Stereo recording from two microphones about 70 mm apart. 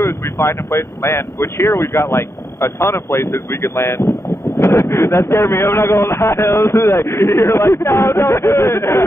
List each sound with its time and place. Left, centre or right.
0.0 s speech: left